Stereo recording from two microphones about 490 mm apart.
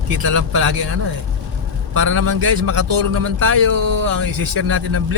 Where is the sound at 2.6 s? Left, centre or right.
Right.